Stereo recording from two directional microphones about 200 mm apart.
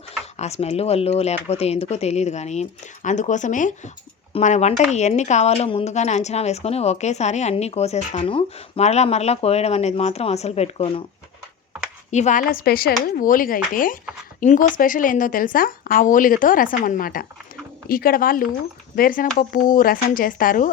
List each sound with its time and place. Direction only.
0.3 s speech: 30° left (ahead or behind)
12.1 s a woman's voice: 40° left (ahead or behind)